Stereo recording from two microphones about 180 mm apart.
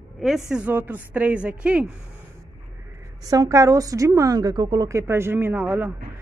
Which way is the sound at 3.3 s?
20° right (ahead or behind).